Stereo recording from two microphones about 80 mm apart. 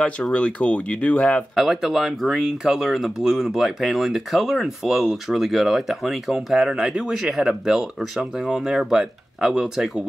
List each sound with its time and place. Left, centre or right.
0.0 s speech: centre
1.5 s speech: centre